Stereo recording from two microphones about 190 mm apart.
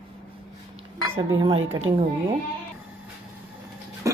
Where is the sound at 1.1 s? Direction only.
25° right (ahead or behind).